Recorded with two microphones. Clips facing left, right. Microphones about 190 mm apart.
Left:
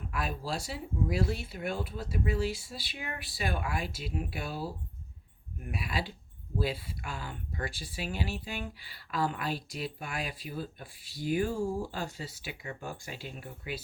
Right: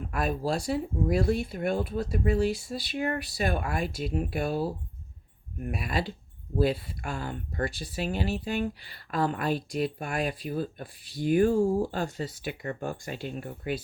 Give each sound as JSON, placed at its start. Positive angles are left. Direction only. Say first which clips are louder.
{"t": 0.1, "sound": "speech", "louder": "right 7 dB", "side_deg": -50}